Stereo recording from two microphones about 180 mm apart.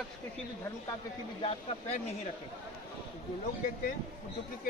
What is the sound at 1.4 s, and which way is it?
Speech, 35° left (ahead or behind).